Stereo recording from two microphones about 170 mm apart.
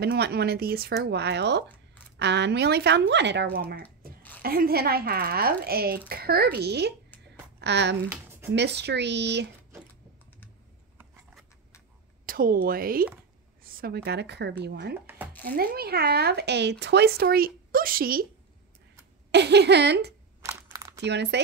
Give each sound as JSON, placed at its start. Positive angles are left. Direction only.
{"t": 0.0, "sound": "speech", "side_deg": -70}
{"t": 7.6, "sound": "speech", "side_deg": -90}
{"t": 12.3, "sound": "speech", "side_deg": -55}
{"t": 15.0, "sound": "a sound", "side_deg": -10}
{"t": 15.4, "sound": "speech", "side_deg": -60}
{"t": 19.3, "sound": "speech", "side_deg": -80}
{"t": 20.4, "sound": "crumpling", "side_deg": -20}
{"t": 21.0, "sound": "speech", "side_deg": -90}